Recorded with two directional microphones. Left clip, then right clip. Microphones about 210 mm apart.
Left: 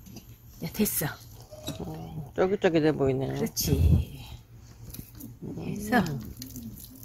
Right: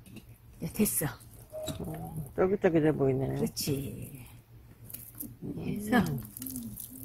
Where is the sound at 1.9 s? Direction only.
Centre (ahead or behind).